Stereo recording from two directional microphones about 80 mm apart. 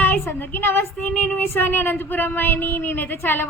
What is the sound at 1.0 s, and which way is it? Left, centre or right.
A woman's voice, centre.